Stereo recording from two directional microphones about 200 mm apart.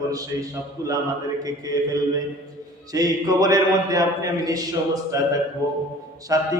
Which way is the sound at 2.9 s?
20° right (ahead or behind).